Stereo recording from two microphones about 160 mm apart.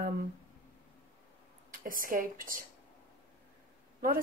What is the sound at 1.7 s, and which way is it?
Speech, 60° right (ahead or behind).